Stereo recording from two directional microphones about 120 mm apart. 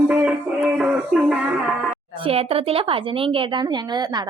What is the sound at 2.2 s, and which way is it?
A woman's voice, 55° right (ahead or behind).